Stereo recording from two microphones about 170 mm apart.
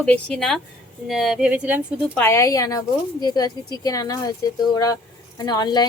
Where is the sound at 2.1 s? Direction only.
15° left (ahead or behind).